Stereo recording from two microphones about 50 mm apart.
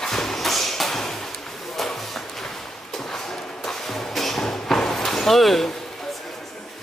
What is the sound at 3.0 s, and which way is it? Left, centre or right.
Music, centre.